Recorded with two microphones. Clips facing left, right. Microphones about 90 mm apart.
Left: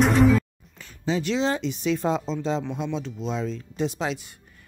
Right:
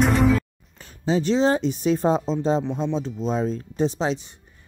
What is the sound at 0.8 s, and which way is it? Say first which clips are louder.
Speech: right 4 dB; 40° right (ahead or behind).